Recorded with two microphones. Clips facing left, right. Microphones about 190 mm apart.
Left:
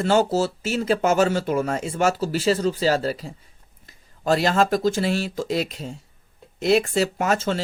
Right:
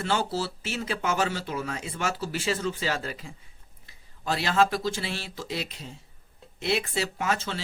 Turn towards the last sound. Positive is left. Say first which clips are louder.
# left 7 dB
turn(degrees=45)  # may be behind; listen again after turning